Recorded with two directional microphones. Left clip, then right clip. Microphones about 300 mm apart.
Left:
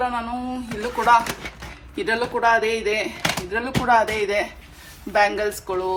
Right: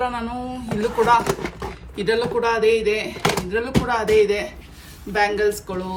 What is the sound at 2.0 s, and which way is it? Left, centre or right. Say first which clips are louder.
A woman's voice: left 1 dB; centre.